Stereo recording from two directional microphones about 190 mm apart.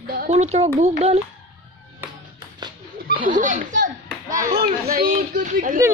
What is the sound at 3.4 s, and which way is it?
Speech, 40° right (ahead or behind).